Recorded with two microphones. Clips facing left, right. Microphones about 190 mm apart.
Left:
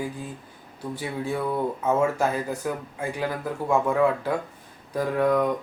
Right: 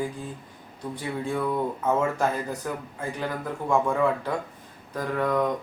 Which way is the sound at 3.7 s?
5° left (ahead or behind).